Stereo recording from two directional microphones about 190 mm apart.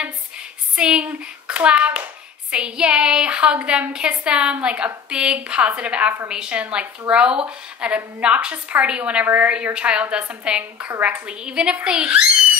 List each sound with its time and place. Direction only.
0.7 s a woman's voice: 5° right (ahead or behind)